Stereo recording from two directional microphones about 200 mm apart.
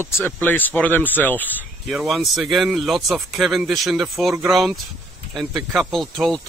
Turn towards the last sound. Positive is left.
turn(degrees=0)  # may be behind; listen again after turning